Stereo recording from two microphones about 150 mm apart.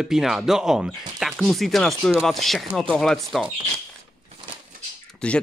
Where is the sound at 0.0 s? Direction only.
Centre (ahead or behind).